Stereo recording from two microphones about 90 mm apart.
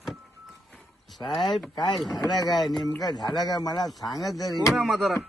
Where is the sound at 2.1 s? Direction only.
45° left (ahead or behind).